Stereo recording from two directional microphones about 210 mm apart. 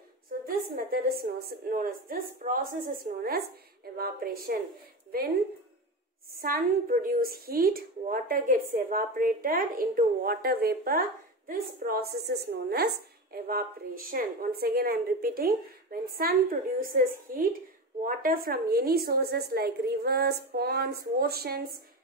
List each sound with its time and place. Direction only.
0.9 s a woman's voice: 45° right (ahead or behind)
3.9 s a woman's voice: 45° right (ahead or behind)
6.4 s a woman's voice: 40° right (ahead or behind)